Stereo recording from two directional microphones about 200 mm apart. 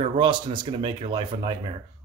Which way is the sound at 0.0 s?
25° right (ahead or behind).